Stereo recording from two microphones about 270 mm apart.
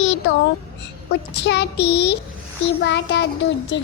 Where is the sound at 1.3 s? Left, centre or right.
Left.